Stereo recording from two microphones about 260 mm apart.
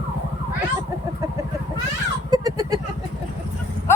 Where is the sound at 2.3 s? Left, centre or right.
Centre.